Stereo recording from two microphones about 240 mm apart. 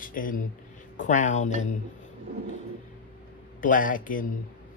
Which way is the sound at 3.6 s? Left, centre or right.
Left.